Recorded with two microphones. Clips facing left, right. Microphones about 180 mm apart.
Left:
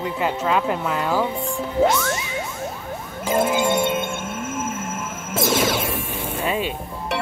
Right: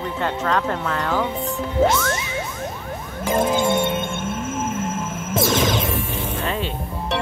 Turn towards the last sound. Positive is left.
turn(degrees=15)  # may be behind; listen again after turning